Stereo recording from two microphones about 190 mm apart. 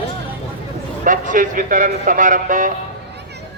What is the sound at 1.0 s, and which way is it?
Speech, 45° right (ahead or behind).